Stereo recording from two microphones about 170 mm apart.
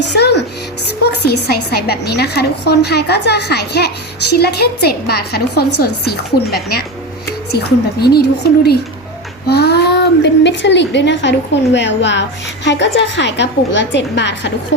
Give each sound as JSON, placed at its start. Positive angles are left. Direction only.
{"t": 0.0, "sound": "music", "side_deg": 80}
{"t": 0.9, "sound": "a woman's voice", "side_deg": 70}